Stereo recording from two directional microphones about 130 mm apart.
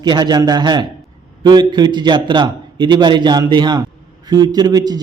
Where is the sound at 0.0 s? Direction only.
35° right (ahead or behind).